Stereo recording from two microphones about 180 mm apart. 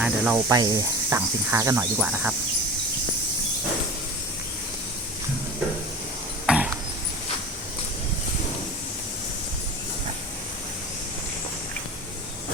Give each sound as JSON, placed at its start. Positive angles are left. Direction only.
{"t": 0.0, "sound": "speech", "side_deg": -5}
{"t": 0.5, "sound": "speech", "side_deg": -20}
{"t": 6.4, "sound": "a sound", "side_deg": -5}